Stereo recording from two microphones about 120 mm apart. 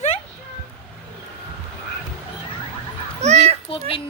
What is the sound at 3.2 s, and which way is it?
Speech, 70° right (ahead or behind).